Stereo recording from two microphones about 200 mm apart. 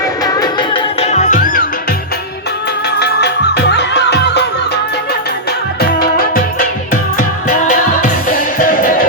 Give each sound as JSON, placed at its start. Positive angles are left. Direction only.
{"t": 0.0, "sound": "music", "side_deg": 20}
{"t": 3.0, "sound": "music", "side_deg": 55}
{"t": 6.0, "sound": "music", "side_deg": 45}